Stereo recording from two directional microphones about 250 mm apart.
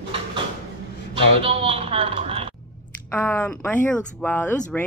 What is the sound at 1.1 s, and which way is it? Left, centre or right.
A man's voice, right.